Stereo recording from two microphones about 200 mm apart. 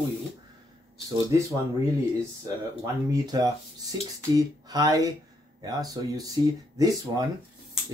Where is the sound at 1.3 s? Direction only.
15° right (ahead or behind).